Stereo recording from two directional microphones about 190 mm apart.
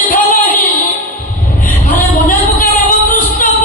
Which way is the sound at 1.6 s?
10° left (ahead or behind).